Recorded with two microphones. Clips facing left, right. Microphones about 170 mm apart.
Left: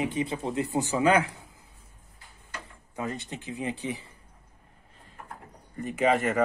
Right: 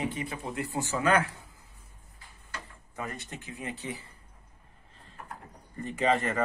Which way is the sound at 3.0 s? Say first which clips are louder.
Left 5 dB; 20° left (ahead or behind).